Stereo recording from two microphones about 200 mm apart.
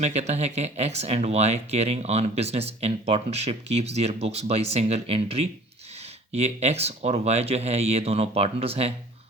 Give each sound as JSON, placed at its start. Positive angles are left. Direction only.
{"t": 0.0, "sound": "speech", "side_deg": -35}